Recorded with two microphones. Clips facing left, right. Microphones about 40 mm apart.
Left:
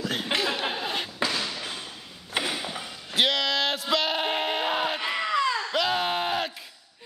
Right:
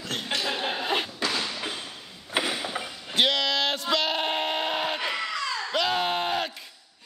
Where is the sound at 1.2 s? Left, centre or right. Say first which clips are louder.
Even; centre.